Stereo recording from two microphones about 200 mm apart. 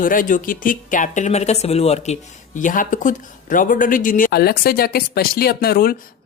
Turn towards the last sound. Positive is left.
turn(degrees=50)  # may be behind; listen again after turning